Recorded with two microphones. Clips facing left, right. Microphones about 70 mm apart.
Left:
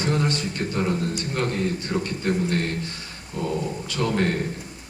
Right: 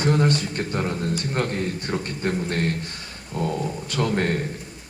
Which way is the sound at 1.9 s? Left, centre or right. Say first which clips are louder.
Left 1 dB; right.